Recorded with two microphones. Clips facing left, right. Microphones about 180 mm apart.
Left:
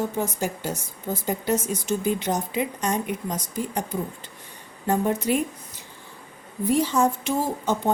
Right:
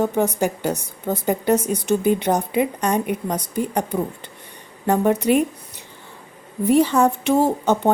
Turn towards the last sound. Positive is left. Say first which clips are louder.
# right 7 dB
turn(degrees=-65)  # may be behind; listen again after turning